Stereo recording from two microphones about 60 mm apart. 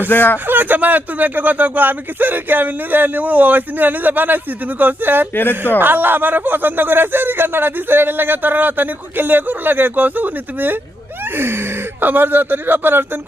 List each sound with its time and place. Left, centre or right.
0.1 s speech: left
0.4 s speech: right
5.3 s speech: left
5.8 s speech: right